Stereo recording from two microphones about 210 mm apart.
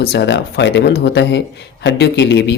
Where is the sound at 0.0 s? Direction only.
55° left (ahead or behind).